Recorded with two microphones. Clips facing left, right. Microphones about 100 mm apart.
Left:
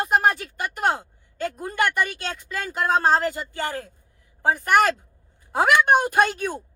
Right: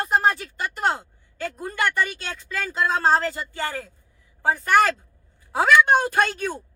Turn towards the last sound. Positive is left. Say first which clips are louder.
# left 2 dB
turn(degrees=15)  # may be behind; listen again after turning